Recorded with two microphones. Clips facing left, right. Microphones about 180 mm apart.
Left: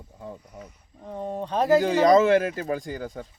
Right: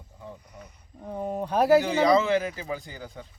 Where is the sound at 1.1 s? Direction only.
10° right (ahead or behind).